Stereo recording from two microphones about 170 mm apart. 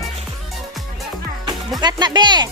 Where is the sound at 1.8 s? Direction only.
25° right (ahead or behind).